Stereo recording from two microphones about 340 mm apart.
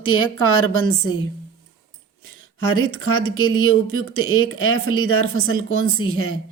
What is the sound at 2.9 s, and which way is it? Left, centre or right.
Speech, left.